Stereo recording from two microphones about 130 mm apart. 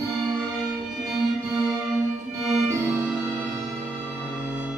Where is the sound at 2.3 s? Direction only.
20° right (ahead or behind).